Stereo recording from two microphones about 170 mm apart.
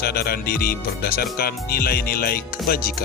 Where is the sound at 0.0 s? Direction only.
65° left (ahead or behind).